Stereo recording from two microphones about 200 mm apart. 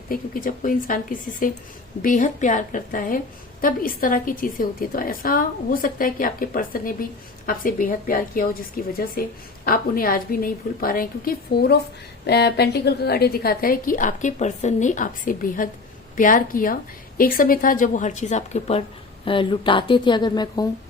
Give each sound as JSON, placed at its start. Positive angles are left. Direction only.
{"t": 0.1, "sound": "a woman's voice", "side_deg": 45}